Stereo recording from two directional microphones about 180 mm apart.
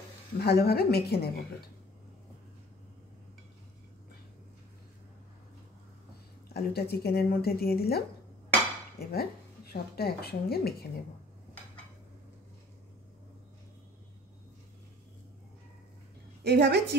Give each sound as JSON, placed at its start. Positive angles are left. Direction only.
{"t": 0.4, "sound": "speech", "side_deg": 60}
{"t": 6.5, "sound": "a woman's voice", "side_deg": 65}
{"t": 16.4, "sound": "a woman's voice", "side_deg": -70}